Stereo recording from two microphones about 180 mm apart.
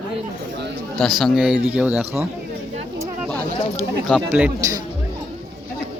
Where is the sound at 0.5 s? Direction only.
70° right (ahead or behind).